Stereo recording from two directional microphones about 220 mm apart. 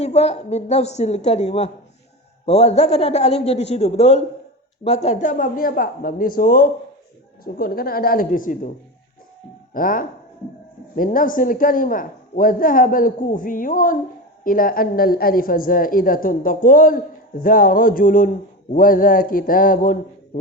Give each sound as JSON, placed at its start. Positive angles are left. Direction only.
{"t": 0.0, "sound": "a woman's voice", "side_deg": 30}
{"t": 9.7, "sound": "a man's voice", "side_deg": 40}